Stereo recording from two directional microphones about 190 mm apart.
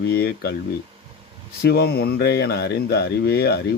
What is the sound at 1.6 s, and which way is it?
Speech, 55° left (ahead or behind).